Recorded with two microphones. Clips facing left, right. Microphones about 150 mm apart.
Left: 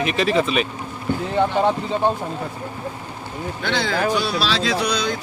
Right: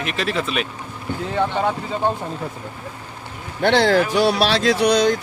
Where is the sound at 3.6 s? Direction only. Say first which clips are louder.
Right 7 dB; 65° right (ahead or behind).